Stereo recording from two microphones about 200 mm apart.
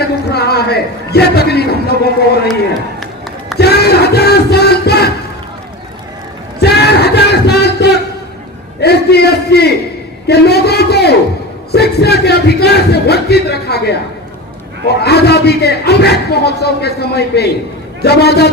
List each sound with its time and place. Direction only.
0.3 s a man's voice: 55° left (ahead or behind)
3.6 s a man's voice: 55° left (ahead or behind)
6.6 s a sound: 55° left (ahead or behind)
8.8 s a man's voice: 55° left (ahead or behind)